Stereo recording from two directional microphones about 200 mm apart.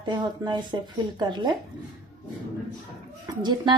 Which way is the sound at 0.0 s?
20° right (ahead or behind).